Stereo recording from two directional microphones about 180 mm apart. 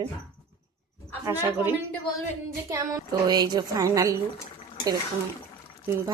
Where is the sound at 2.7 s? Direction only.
20° right (ahead or behind).